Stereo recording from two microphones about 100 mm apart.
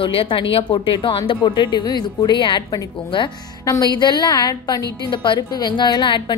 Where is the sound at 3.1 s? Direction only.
55° left (ahead or behind).